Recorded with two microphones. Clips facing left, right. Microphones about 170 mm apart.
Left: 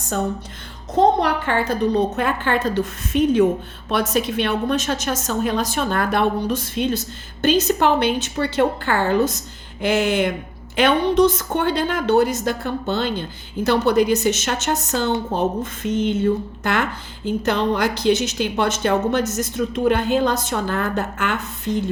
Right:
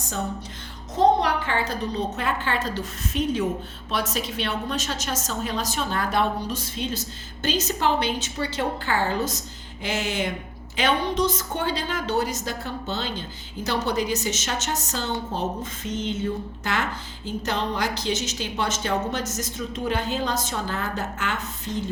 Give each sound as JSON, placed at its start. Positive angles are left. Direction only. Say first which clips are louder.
{"t": 1.2, "sound": "a woman's voice", "louder": "left 4 dB", "side_deg": 55}